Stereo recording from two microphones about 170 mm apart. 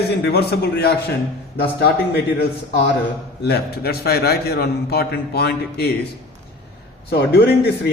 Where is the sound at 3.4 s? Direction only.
70° left (ahead or behind).